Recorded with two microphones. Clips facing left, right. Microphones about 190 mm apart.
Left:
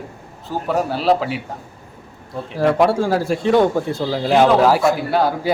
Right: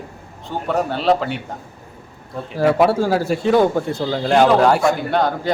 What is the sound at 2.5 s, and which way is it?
Speech, centre (ahead or behind).